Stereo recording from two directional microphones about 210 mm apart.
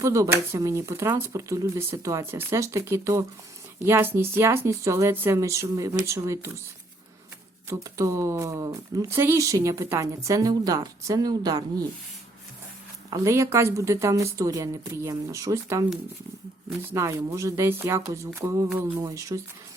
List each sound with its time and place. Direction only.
0.0 s speech: 15° right (ahead or behind)
7.7 s speech: 15° right (ahead or behind)
13.1 s speech: 15° right (ahead or behind)
16.9 s speech: 15° right (ahead or behind)